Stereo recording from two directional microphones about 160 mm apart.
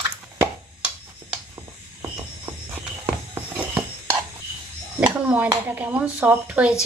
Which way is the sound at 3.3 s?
10° right (ahead or behind).